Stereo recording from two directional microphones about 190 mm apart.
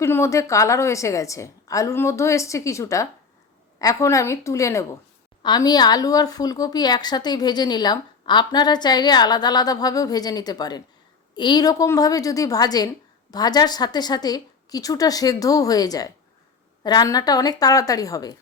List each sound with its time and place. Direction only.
0.0 s a woman's voice: 15° left (ahead or behind)